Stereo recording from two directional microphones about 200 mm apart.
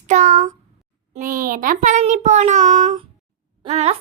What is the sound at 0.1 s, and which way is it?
A child's voice, 35° right (ahead or behind).